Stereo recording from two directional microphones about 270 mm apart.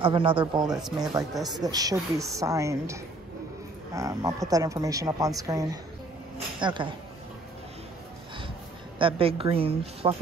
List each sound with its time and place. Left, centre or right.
0.0 s a woman's voice: centre
0.7 s speech: centre
1.5 s speech: centre
8.9 s a woman's voice: centre